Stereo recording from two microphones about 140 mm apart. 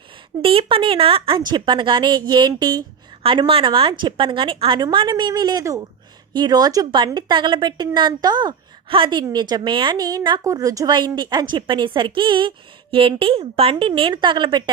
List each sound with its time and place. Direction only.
0.4 s a woman's voice: 40° right (ahead or behind)
3.2 s a woman's voice: 40° right (ahead or behind)